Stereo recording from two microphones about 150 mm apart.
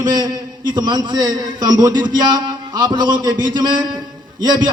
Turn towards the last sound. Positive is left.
turn(degrees=-30)  # may be behind; listen again after turning